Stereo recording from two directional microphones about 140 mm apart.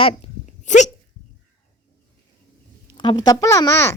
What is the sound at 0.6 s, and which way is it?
Dog, 60° left (ahead or behind).